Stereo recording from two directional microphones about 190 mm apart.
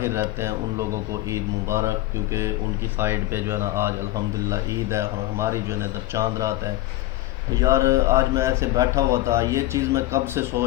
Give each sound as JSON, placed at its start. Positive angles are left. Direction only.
{"t": 0.0, "sound": "speech", "side_deg": -15}
{"t": 3.0, "sound": "speech", "side_deg": -10}
{"t": 7.6, "sound": "speech", "side_deg": -15}